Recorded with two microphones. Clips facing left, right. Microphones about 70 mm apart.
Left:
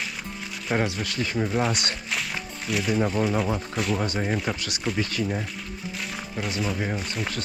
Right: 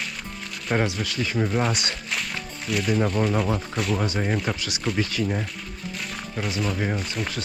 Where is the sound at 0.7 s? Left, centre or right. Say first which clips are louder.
Right 1 dB; right.